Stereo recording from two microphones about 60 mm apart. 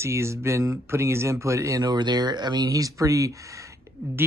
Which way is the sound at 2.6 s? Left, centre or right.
Right.